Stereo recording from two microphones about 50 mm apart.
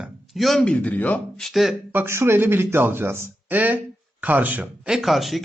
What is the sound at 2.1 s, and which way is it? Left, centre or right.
Speech, right.